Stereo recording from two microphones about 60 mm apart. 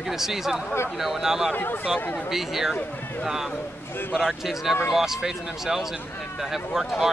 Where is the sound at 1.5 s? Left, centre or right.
Left.